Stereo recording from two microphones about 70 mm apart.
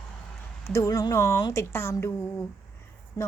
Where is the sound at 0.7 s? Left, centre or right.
Left.